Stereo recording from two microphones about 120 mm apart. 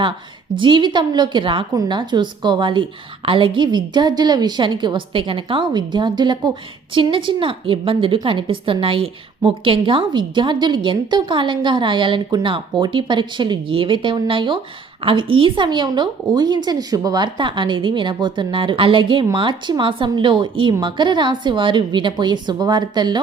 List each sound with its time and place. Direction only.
0.5 s a woman's voice: 45° right (ahead or behind)